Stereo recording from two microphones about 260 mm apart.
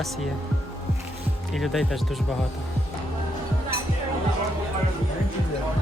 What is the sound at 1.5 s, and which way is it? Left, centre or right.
Speech, centre.